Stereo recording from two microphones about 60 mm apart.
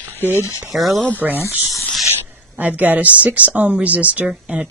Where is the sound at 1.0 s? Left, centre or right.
Left.